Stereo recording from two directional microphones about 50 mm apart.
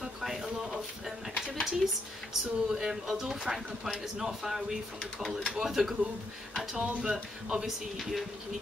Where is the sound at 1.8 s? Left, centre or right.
Centre.